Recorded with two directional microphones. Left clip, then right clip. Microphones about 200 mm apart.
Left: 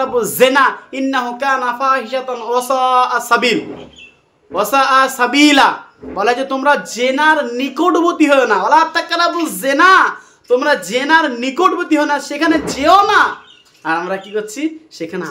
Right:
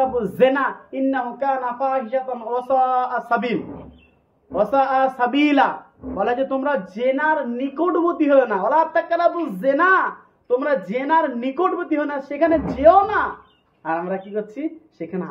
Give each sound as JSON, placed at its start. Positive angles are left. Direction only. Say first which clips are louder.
{"t": 0.0, "sound": "a man's voice", "louder": "left 5 dB", "side_deg": 20}
{"t": 4.6, "sound": "a man's voice", "louder": "left 6 dB", "side_deg": 20}